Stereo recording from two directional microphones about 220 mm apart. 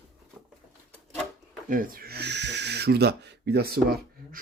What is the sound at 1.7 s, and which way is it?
Speech, 40° right (ahead or behind).